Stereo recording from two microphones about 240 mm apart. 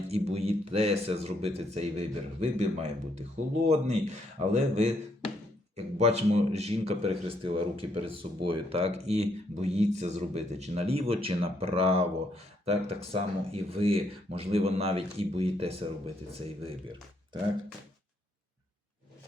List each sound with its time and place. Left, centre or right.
0.1 s speech: right